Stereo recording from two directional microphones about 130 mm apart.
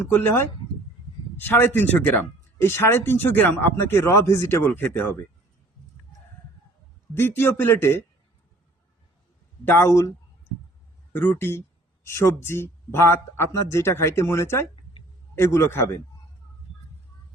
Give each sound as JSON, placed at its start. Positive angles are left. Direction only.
{"t": 0.0, "sound": "speech", "side_deg": 15}
{"t": 7.1, "sound": "speech", "side_deg": 15}
{"t": 9.6, "sound": "speech", "side_deg": 20}
{"t": 11.1, "sound": "speech", "side_deg": 15}